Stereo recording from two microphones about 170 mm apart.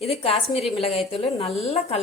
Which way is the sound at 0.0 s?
35° left (ahead or behind).